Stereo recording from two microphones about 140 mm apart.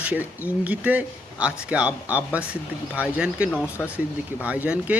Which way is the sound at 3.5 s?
15° left (ahead or behind).